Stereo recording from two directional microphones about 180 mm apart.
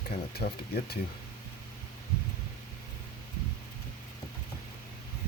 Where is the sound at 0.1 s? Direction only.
60° left (ahead or behind).